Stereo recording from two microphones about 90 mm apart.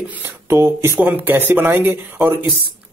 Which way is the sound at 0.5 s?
30° right (ahead or behind).